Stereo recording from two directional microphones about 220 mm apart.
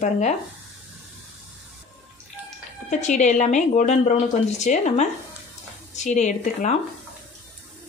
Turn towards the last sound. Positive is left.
turn(degrees=35)  # may be behind; listen again after turning